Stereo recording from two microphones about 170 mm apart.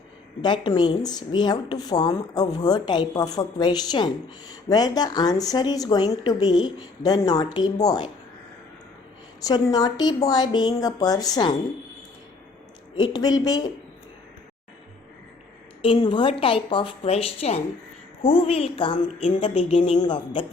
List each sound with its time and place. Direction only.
0.4 s a woman's voice: 25° left (ahead or behind)
9.4 s a woman's voice: 20° left (ahead or behind)
13.0 s a woman's voice: 25° left (ahead or behind)
15.8 s a woman's voice: 30° left (ahead or behind)